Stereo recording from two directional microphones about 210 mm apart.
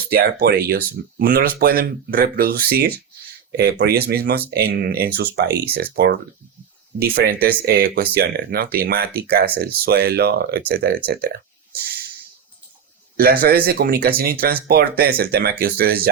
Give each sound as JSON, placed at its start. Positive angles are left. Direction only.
{"t": 0.1, "sound": "speech", "side_deg": -45}
{"t": 13.1, "sound": "speech", "side_deg": -45}